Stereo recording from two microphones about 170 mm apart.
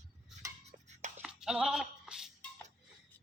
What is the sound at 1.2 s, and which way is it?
Music, 5° right (ahead or behind).